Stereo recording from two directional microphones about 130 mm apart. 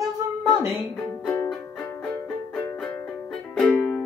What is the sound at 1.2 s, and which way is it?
Music, 15° left (ahead or behind).